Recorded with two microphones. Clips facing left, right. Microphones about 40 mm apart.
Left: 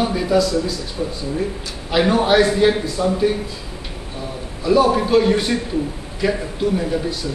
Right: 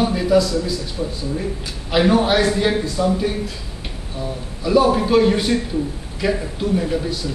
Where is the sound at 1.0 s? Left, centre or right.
Centre.